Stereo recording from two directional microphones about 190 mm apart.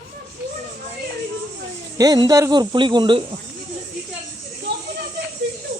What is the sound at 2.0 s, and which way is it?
Speech, 20° right (ahead or behind).